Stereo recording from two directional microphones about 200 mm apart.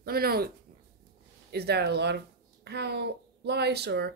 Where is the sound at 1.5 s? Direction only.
55° right (ahead or behind).